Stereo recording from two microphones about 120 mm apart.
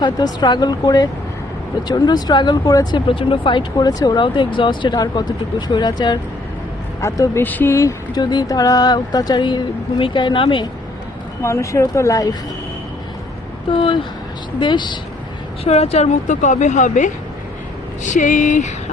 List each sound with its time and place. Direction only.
0.0 s speech: 35° left (ahead or behind)
3.1 s speech: 45° left (ahead or behind)
7.0 s speech: 25° left (ahead or behind); by 10.7 s 45° left (ahead or behind)
11.4 s speech: 25° left (ahead or behind)
13.7 s speech: 45° left (ahead or behind)
15.6 s a woman's voice: 60° left (ahead or behind); by 18.7 s 90° left